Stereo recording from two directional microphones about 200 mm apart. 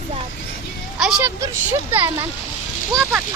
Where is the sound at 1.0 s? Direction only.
5° right (ahead or behind).